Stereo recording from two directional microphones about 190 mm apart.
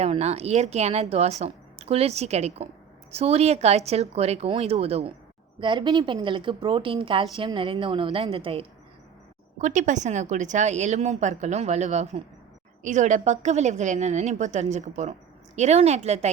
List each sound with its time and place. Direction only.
0.0 s a woman's voice: 35° right (ahead or behind)